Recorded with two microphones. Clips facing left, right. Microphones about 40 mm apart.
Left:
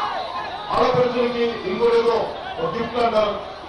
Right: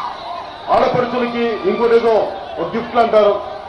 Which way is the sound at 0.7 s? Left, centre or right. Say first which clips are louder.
Right 4 dB; right.